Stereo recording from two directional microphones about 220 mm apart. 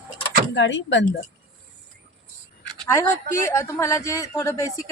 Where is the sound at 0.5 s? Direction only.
55° left (ahead or behind).